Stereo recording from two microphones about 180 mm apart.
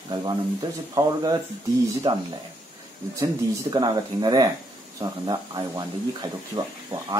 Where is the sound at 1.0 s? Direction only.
20° right (ahead or behind).